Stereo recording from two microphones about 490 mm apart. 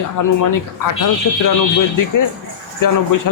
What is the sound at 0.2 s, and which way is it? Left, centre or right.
Speech, left.